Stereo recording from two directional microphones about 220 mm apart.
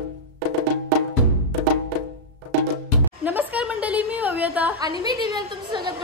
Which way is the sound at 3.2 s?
5° right (ahead or behind).